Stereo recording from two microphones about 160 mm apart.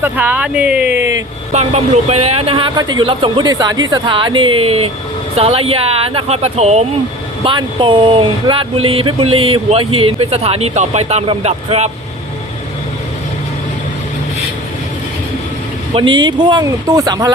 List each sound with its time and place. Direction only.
0.0 s speech: 10° right (ahead or behind)
1.5 s speech: 40° right (ahead or behind)
7.4 s speech: 30° right (ahead or behind)
16.0 s speech: 30° right (ahead or behind)